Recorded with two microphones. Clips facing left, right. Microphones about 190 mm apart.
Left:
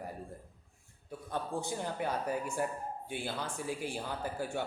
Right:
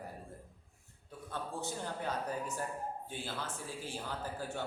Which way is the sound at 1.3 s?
15° left (ahead or behind).